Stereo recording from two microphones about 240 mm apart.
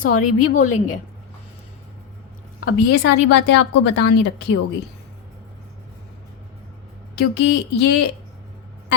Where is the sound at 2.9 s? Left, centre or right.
Left.